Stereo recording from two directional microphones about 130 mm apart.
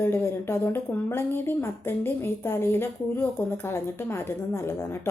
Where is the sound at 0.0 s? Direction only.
15° left (ahead or behind).